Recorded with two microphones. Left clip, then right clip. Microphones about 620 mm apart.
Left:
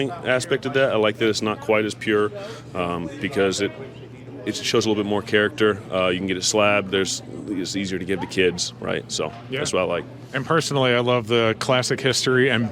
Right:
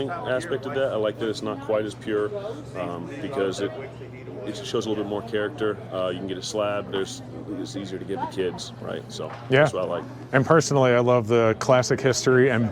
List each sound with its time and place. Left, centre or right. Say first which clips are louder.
0.0 s speech: left 4 dB; left
5.3 s speech: left 9 dB; left
10.4 s speech: even; centre